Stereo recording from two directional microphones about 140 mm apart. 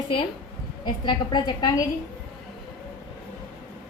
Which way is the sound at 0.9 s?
35° left (ahead or behind).